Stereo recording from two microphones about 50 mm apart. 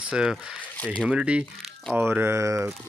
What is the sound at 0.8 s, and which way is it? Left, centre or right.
Speech, left.